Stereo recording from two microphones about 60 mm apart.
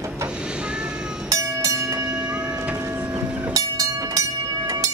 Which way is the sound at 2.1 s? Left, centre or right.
Centre.